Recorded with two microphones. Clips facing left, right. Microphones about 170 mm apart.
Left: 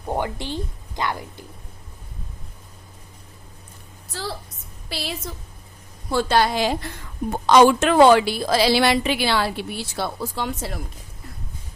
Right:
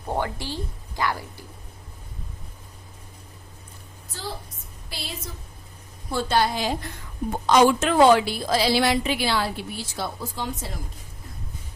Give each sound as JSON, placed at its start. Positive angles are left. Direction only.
{"t": 0.0, "sound": "speech", "side_deg": 15}
{"t": 4.1, "sound": "a woman's voice", "side_deg": 80}